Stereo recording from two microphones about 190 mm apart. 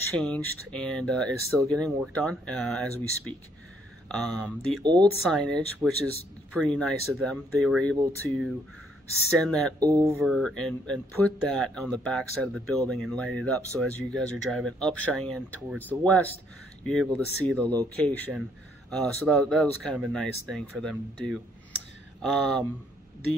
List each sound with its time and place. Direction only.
0.2 s speech: 5° left (ahead or behind)
9.4 s speech: 5° left (ahead or behind)
9.8 s speech: 20° right (ahead or behind)
10.2 s speech: centre (ahead or behind)